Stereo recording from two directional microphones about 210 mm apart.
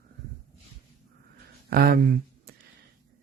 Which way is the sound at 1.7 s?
45° right (ahead or behind).